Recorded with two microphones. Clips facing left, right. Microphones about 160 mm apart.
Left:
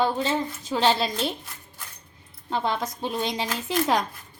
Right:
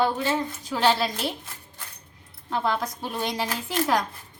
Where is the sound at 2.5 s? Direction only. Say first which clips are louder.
Even; 30° left (ahead or behind).